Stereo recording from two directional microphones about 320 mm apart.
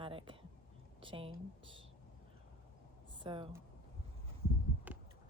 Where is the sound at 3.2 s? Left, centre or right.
Centre.